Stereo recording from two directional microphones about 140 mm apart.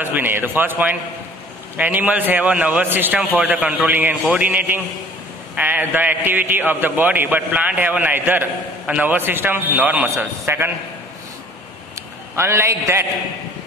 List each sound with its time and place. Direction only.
0.0 s a man's voice: 15° right (ahead or behind)
12.4 s a man's voice: 20° right (ahead or behind)